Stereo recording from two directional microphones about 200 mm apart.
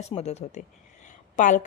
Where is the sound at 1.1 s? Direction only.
40° left (ahead or behind).